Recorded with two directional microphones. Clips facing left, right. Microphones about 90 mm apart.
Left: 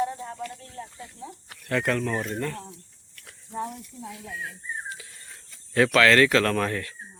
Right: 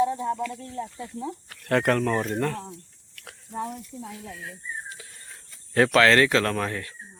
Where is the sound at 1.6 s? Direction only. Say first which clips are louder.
Right 4 dB; 55° right (ahead or behind).